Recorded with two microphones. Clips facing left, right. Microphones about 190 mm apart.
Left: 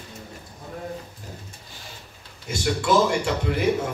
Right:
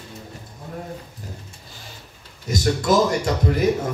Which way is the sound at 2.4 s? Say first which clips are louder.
Right 3 dB; 40° right (ahead or behind).